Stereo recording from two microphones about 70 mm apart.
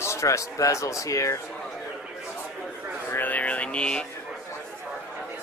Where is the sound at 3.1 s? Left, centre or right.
Left.